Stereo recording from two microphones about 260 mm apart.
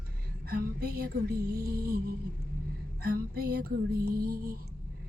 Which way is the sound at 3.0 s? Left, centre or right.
Right.